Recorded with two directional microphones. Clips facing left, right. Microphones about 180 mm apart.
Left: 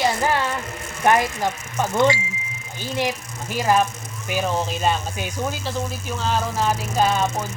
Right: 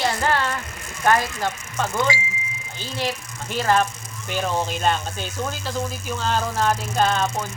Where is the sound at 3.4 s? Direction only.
10° left (ahead or behind).